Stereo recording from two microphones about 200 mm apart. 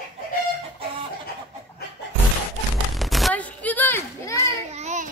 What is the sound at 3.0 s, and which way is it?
Artillery fire, centre (ahead or behind).